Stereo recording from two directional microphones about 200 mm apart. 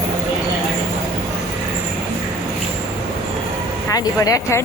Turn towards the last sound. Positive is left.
turn(degrees=15)  # may be behind; listen again after turning